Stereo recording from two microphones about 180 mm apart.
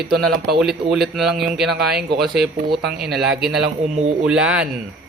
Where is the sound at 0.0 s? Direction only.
Centre (ahead or behind).